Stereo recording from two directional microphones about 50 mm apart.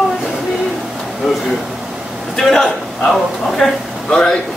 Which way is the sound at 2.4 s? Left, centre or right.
Centre.